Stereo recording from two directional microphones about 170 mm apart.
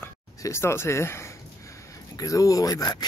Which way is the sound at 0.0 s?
15° left (ahead or behind).